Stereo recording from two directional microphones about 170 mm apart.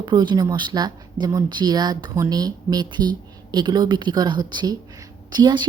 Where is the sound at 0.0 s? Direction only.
25° right (ahead or behind).